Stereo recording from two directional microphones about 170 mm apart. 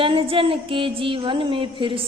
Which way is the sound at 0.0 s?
30° right (ahead or behind).